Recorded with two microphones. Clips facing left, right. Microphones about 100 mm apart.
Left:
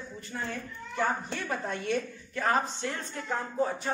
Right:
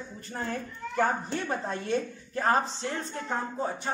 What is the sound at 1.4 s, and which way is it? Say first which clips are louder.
Speech: right 1 dB; 30° right (ahead or behind).